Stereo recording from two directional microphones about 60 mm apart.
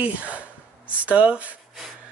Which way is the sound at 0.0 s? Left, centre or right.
Right.